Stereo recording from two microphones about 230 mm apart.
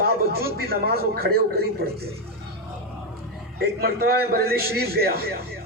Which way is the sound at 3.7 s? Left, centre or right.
Right.